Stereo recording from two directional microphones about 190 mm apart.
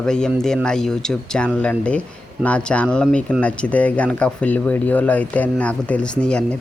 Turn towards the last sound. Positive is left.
turn(degrees=5)  # may be behind; listen again after turning